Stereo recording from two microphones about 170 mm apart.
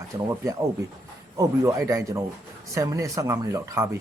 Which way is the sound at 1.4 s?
20° right (ahead or behind).